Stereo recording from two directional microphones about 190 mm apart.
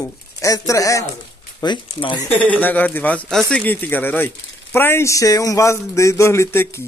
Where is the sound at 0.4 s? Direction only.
15° left (ahead or behind).